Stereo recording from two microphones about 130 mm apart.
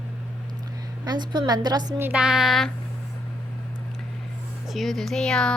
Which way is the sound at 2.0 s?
10° right (ahead or behind).